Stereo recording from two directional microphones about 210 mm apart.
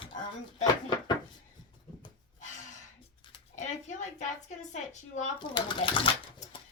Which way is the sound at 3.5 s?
35° left (ahead or behind).